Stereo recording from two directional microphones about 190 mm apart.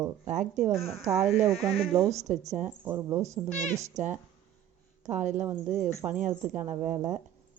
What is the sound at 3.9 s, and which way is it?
Speech, 40° right (ahead or behind).